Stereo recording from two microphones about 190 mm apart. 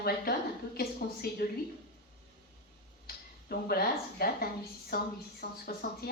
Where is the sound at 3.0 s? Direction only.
55° left (ahead or behind).